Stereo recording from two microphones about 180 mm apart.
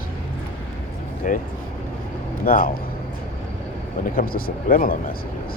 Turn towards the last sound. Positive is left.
turn(degrees=50)  # may be behind; listen again after turning